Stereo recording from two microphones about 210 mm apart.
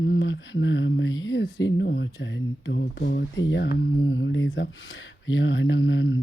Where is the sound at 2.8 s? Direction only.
50° left (ahead or behind).